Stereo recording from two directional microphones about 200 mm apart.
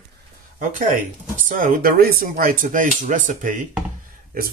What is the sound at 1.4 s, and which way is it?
Speech, 45° right (ahead or behind).